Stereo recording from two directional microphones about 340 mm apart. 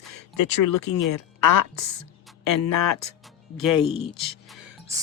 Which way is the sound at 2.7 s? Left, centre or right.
Left.